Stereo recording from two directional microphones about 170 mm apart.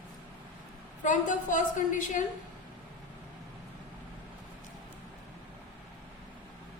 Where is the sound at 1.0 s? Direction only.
50° left (ahead or behind).